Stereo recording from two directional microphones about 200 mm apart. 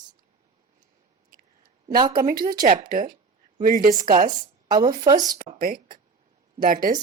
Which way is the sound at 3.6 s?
45° right (ahead or behind).